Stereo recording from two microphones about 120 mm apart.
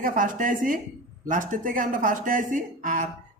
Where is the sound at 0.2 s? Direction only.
90° right.